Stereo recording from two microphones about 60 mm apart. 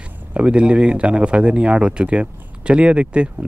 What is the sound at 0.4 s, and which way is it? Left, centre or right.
Speech, centre.